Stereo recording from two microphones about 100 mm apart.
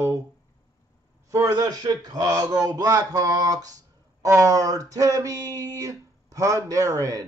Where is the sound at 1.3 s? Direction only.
35° right (ahead or behind).